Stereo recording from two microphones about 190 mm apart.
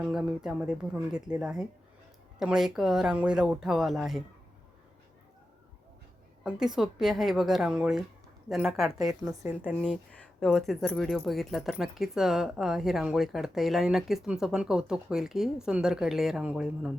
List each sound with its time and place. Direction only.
0.0 s speech: 5° right (ahead or behind)
6.4 s speech: centre (ahead or behind)
9.3 s a woman's voice: 15° right (ahead or behind)
9.8 s speech: 5° left (ahead or behind)